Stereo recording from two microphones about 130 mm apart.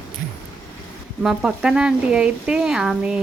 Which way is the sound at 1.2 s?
5° right (ahead or behind).